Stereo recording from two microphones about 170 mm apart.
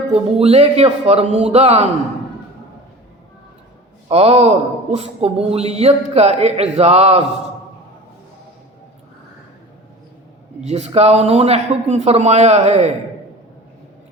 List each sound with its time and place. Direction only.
0.1 s speech: 35° right (ahead or behind)
4.1 s speech: 35° right (ahead or behind)
10.7 s speech: 40° right (ahead or behind)